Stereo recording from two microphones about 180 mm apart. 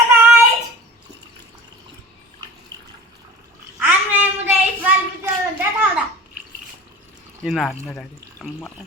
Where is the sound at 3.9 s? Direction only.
10° right (ahead or behind).